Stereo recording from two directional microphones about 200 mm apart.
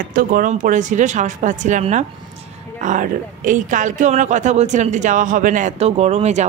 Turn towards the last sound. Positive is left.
turn(degrees=-35)  # may be behind; listen again after turning